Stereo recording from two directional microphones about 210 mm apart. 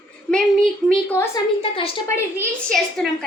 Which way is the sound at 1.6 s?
25° left (ahead or behind).